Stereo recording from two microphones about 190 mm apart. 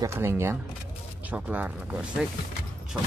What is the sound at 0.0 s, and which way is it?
Speech, 15° right (ahead or behind).